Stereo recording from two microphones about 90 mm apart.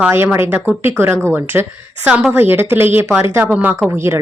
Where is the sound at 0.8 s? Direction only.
25° right (ahead or behind).